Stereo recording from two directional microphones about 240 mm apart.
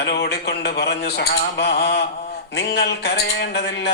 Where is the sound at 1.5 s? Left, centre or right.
Left.